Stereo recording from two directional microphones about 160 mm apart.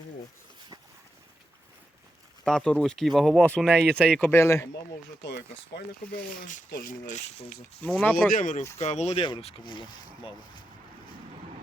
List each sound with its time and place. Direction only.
2.4 s speech: 5° left (ahead or behind)
5.2 s speech: 90° left
6.3 s speech: 50° left (ahead or behind)
6.7 s speech: 70° left (ahead or behind)
7.1 s speech: 45° left (ahead or behind)
7.9 s speech: centre (ahead or behind)
8.3 s speech: 55° left (ahead or behind)
8.8 s speech: 45° left (ahead or behind)